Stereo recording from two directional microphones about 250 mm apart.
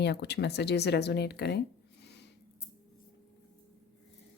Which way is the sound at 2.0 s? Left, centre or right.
Left.